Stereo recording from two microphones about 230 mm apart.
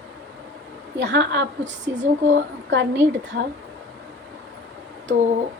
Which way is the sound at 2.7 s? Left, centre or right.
Right.